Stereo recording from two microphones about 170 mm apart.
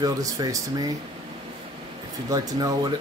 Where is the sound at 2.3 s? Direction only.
20° right (ahead or behind).